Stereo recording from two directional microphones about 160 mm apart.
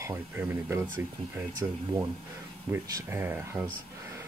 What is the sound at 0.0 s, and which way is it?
Speech, 15° right (ahead or behind).